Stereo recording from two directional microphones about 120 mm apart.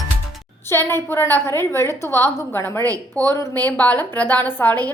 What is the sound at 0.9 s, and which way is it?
A woman's voice, 20° left (ahead or behind).